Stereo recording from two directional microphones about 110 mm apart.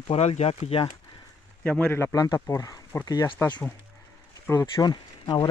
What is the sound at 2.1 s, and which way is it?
Speech, 30° left (ahead or behind).